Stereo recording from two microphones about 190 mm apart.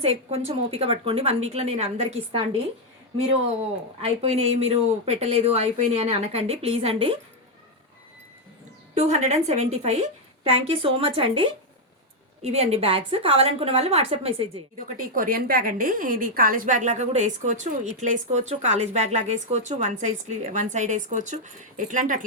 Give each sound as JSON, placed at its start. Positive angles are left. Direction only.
{"t": 0.0, "sound": "a woman's voice", "side_deg": -35}
{"t": 4.0, "sound": "a woman's voice", "side_deg": -35}
{"t": 9.0, "sound": "a woman's voice", "side_deg": -35}
{"t": 14.9, "sound": "a woman's voice", "side_deg": -45}